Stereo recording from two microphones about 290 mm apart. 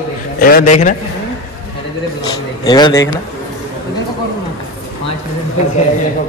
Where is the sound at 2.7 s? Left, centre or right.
Centre.